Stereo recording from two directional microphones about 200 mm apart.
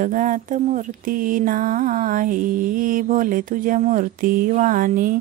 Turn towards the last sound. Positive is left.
turn(degrees=-40)  # may be behind; listen again after turning